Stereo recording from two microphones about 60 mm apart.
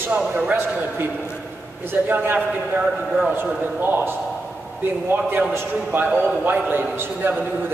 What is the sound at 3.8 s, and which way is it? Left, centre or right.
A man's voice, right.